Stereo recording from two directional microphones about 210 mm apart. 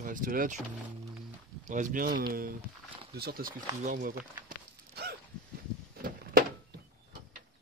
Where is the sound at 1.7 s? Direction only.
40° right (ahead or behind).